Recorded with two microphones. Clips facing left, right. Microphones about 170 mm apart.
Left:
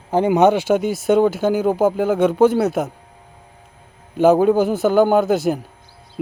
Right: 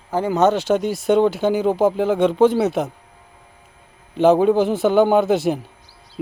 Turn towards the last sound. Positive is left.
turn(degrees=0)  # may be behind; listen again after turning